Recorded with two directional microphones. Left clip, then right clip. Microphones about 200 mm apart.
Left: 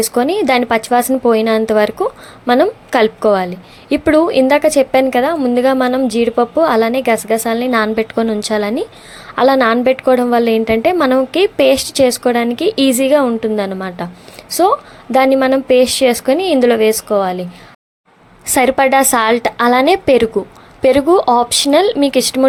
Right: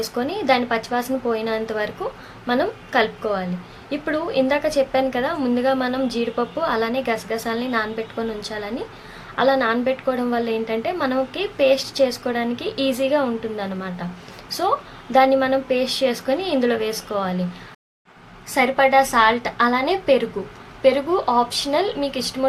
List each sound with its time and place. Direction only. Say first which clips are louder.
0.1 s a woman's voice: left 5 dB; 40° left (ahead or behind)
18.4 s a woman's voice: left 6 dB; 45° left (ahead or behind)